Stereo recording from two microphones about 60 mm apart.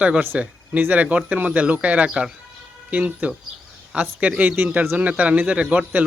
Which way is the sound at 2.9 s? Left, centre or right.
Right.